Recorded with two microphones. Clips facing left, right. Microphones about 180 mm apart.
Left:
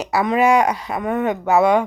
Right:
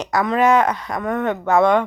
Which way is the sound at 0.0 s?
10° left (ahead or behind).